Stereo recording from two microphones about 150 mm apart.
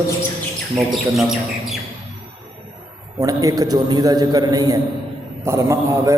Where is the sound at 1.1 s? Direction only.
Centre (ahead or behind).